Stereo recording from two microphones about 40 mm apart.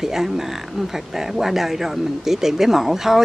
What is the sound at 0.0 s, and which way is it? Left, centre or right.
Speech, centre.